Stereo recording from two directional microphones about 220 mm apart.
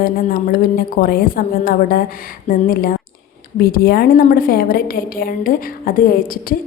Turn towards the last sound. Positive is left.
turn(degrees=40)  # may be behind; listen again after turning